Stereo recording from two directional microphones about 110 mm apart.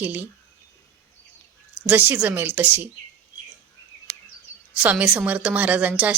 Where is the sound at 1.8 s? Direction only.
15° right (ahead or behind).